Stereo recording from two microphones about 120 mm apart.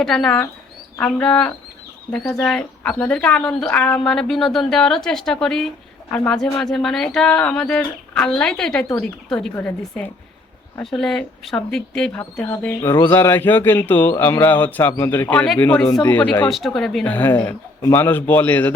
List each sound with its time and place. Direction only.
0.0 s speech: 5° left (ahead or behind)
16.5 s speech: centre (ahead or behind)
17.1 s speech: 15° left (ahead or behind)